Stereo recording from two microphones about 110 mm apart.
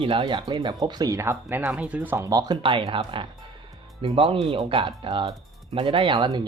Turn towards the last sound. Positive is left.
turn(degrees=-40)  # may be behind; listen again after turning